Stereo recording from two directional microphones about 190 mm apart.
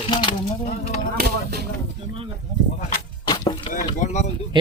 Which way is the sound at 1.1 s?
55° right (ahead or behind).